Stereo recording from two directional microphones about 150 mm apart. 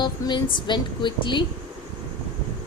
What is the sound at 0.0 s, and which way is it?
Speech, 30° left (ahead or behind).